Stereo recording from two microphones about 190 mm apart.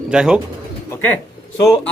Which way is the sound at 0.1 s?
5° right (ahead or behind).